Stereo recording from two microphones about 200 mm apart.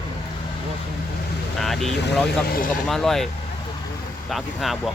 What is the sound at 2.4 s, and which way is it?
Speech, 45° left (ahead or behind).